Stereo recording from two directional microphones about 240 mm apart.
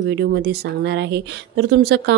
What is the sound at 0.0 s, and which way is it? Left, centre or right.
Speech, right.